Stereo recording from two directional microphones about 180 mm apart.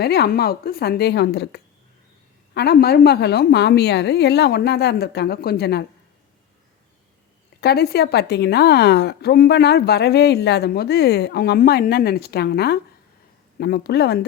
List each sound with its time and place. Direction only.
0.0 s a woman's voice: 60° left (ahead or behind)
7.6 s a woman's voice: 60° left (ahead or behind)